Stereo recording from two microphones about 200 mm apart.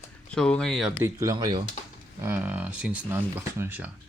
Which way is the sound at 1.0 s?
15° right (ahead or behind).